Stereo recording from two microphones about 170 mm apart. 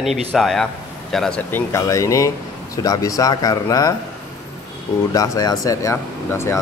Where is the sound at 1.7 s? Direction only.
20° left (ahead or behind).